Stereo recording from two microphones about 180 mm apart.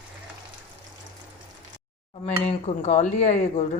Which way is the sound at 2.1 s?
40° left (ahead or behind).